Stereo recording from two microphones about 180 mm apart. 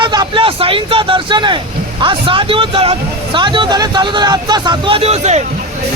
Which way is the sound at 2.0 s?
30° right (ahead or behind).